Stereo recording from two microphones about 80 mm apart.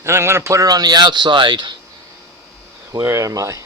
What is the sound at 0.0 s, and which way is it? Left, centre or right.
A man's voice, right.